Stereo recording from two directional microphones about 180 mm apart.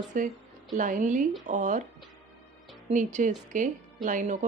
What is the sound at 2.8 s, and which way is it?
Speech, 45° right (ahead or behind).